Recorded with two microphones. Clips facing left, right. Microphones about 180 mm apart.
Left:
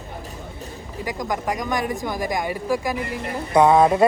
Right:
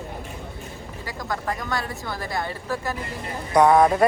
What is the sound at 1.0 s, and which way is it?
Speech, 15° left (ahead or behind).